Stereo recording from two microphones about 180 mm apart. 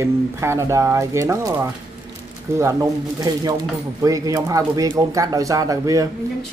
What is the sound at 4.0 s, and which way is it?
Speech, 20° right (ahead or behind).